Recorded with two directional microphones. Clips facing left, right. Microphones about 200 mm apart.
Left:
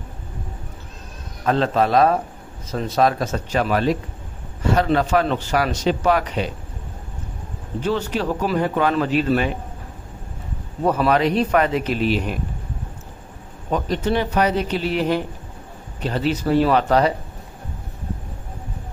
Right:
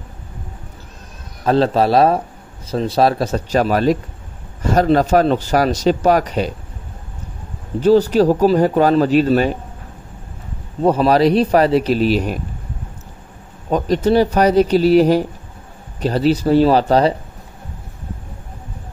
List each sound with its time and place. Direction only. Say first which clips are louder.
1.4 s speech: right 4 dB; 35° right (ahead or behind)
7.8 s speech: right 11 dB; 35° right (ahead or behind)
10.8 s speech: right 5 dB; 30° right (ahead or behind)
13.7 s speech: right 6 dB; 40° right (ahead or behind)